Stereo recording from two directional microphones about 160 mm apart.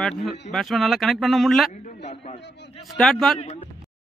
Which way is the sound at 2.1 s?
40° left (ahead or behind).